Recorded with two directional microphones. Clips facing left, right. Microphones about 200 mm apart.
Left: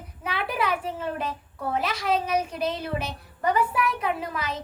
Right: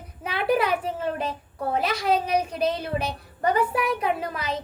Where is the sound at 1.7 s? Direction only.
35° right (ahead or behind).